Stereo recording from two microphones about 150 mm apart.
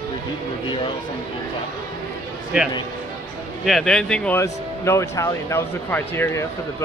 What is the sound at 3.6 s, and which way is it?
Speech, 5° left (ahead or behind).